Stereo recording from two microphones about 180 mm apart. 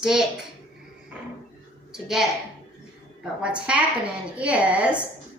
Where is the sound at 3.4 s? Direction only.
5° right (ahead or behind).